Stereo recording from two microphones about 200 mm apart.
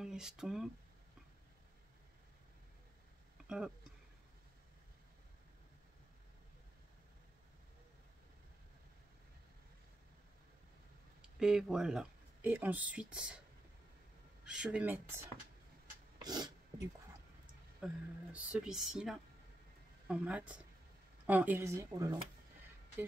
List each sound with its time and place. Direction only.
0.0 s speech: 5° right (ahead or behind)
3.4 s speech: 5° right (ahead or behind)
11.3 s speech: 5° right (ahead or behind)
14.4 s speech: 5° right (ahead or behind)
16.2 s a sound: 20° right (ahead or behind)
17.7 s speech: 5° right (ahead or behind)